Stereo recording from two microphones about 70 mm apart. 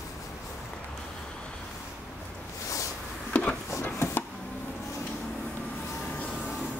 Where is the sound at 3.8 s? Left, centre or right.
Left.